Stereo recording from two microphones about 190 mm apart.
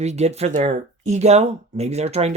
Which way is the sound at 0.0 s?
35° right (ahead or behind).